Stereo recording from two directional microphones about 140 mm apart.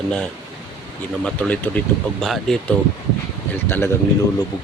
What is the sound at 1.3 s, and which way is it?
Speech, 10° left (ahead or behind).